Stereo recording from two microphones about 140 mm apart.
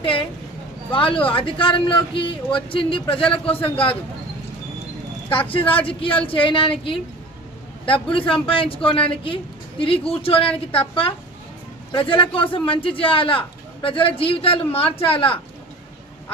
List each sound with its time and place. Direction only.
0.0 s speech: 40° left (ahead or behind)
5.3 s speech: 40° left (ahead or behind)